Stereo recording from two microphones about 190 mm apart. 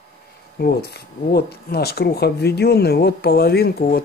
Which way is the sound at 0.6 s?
55° left (ahead or behind).